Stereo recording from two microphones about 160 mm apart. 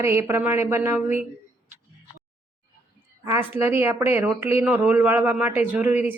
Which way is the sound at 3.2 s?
15° right (ahead or behind).